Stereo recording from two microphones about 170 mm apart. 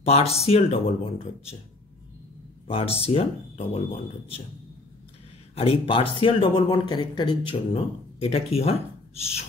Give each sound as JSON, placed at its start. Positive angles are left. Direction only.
{"t": 0.0, "sound": "speech", "side_deg": 35}
{"t": 3.0, "sound": "speech", "side_deg": 35}
{"t": 5.5, "sound": "speech", "side_deg": 35}